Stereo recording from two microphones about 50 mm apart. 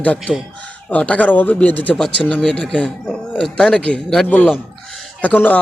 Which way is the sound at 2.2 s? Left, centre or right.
Left.